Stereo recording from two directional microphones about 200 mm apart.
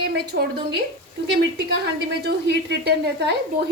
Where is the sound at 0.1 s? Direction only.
55° right (ahead or behind).